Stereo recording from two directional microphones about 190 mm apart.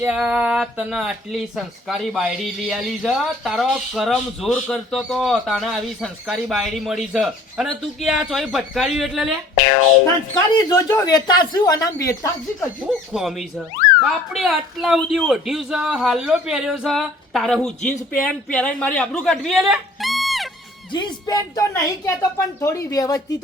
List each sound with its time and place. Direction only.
0.0 s speech: 5° right (ahead or behind)
10.5 s speech: 20° left (ahead or behind)
13.1 s speech: centre (ahead or behind)
20.9 s a woman's voice: 20° left (ahead or behind)